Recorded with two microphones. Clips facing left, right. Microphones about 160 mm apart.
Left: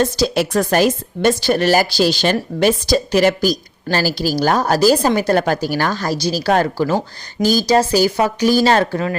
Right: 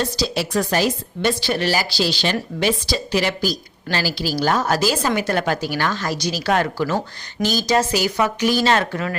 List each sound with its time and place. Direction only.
0.0 s a woman's voice: 50° left (ahead or behind); by 9.1 s 35° left (ahead or behind)